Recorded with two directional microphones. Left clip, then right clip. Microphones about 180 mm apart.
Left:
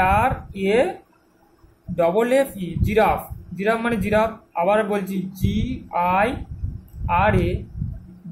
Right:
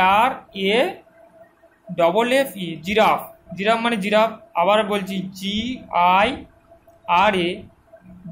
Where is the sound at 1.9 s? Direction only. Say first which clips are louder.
Right 1 dB; 15° left (ahead or behind).